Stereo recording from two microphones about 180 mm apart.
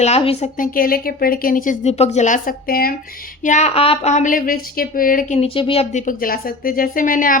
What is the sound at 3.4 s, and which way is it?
A woman's voice, 40° left (ahead or behind).